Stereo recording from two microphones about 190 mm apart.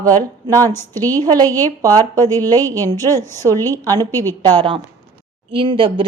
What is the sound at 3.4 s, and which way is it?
Speech, 10° left (ahead or behind).